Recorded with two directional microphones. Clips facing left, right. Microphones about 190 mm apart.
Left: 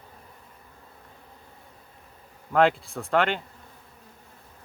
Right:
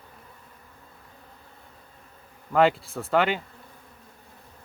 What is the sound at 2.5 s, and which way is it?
Speech, centre (ahead or behind).